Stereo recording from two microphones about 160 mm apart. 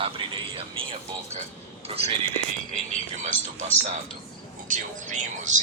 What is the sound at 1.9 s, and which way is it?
Speech, 35° right (ahead or behind).